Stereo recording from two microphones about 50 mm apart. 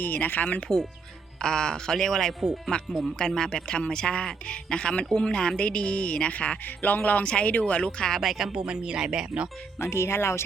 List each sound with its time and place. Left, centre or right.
0.0 s speech: left
0.6 s speech: centre
8.1 s speech: centre
8.5 s speech: centre
9.7 s speech: left